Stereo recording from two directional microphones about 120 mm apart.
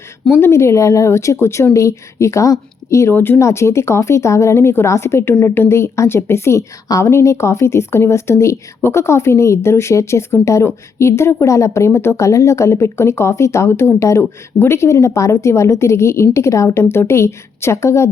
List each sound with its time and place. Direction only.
0.3 s a woman's voice: 20° left (ahead or behind)